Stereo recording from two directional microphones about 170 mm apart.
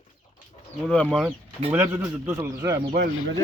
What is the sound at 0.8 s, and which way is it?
Speech, 5° left (ahead or behind).